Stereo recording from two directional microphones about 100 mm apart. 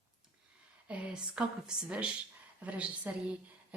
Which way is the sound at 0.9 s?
10° right (ahead or behind).